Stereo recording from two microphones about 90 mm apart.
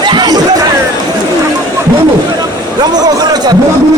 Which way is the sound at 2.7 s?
50° right (ahead or behind).